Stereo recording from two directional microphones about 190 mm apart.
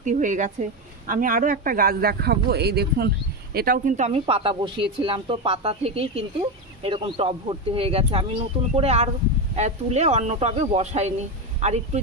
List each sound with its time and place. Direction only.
0.0 s a woman's voice: 40° right (ahead or behind); by 3.1 s 60° right (ahead or behind)
3.5 s speech: 50° right (ahead or behind)